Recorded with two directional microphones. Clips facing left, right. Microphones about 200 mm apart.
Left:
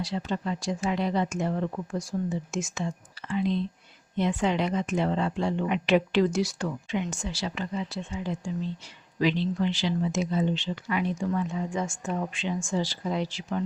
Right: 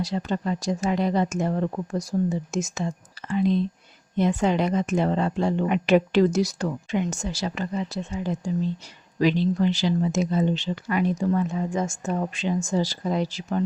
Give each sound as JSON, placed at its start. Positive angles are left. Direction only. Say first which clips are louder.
{"t": 0.0, "sound": "a woman's voice", "louder": "right 4 dB", "side_deg": -45}